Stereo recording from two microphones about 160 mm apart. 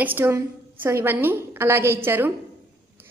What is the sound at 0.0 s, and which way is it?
A woman's voice, 15° right (ahead or behind).